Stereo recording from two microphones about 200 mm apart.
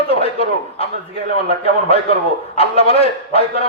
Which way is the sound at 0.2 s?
30° left (ahead or behind).